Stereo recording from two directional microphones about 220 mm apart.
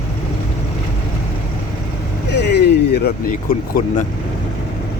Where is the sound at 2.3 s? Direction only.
50° left (ahead or behind).